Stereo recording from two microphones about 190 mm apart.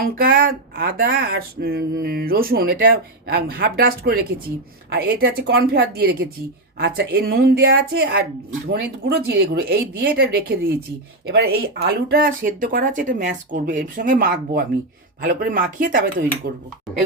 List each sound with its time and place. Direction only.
0.0 s speech: 50° right (ahead or behind)